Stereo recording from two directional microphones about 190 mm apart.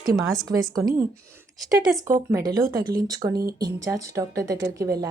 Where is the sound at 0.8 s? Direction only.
15° right (ahead or behind).